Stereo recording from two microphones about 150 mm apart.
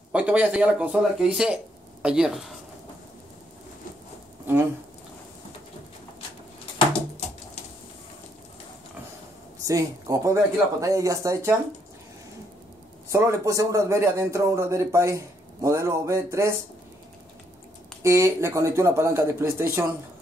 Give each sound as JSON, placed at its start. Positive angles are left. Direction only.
{"t": 0.1, "sound": "speech", "side_deg": -10}
{"t": 4.5, "sound": "speech", "side_deg": -15}
{"t": 9.7, "sound": "speech", "side_deg": -20}
{"t": 13.1, "sound": "speech", "side_deg": -20}
{"t": 18.0, "sound": "speech", "side_deg": -20}